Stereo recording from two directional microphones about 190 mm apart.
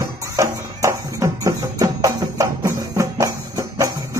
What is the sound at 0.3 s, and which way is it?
Music, 15° right (ahead or behind).